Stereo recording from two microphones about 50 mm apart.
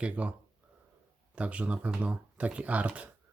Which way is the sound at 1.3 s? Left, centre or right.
Right.